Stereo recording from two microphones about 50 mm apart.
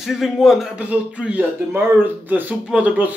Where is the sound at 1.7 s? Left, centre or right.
Right.